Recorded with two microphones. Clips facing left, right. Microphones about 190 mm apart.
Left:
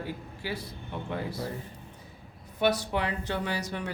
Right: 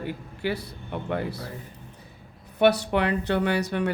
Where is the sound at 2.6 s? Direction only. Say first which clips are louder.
Right 6 dB; 65° right (ahead or behind).